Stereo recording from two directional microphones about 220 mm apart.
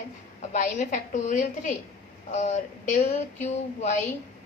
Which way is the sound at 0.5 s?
35° left (ahead or behind).